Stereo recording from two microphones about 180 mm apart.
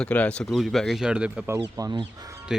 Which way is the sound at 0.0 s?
5° left (ahead or behind).